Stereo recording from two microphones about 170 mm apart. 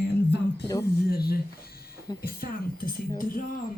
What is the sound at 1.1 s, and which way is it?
A woman's voice, 65° left (ahead or behind).